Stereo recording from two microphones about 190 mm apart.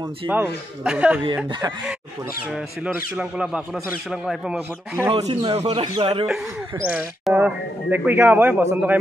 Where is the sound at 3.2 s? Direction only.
5° right (ahead or behind).